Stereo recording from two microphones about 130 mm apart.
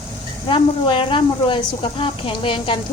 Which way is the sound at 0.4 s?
40° left (ahead or behind).